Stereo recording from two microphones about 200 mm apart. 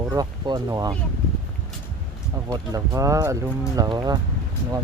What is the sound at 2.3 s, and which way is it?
Speech, 15° right (ahead or behind).